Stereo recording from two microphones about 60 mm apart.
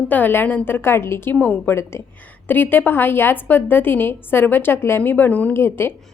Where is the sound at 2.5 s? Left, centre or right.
Left.